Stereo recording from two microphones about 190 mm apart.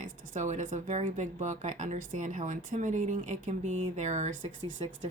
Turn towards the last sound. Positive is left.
turn(degrees=-30)  # may be behind; listen again after turning